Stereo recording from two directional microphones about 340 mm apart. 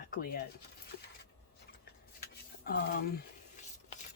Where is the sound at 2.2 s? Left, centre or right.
Left.